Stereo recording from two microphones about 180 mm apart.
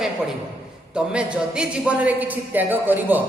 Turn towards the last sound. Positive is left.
turn(degrees=-10)  # may be behind; listen again after turning